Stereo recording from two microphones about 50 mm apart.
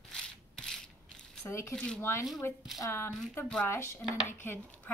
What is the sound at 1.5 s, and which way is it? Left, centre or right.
Speech, left.